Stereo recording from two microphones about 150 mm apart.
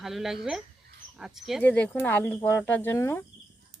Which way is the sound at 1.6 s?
10° left (ahead or behind).